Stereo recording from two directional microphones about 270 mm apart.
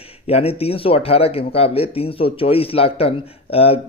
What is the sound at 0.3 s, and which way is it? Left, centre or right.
Speech, left.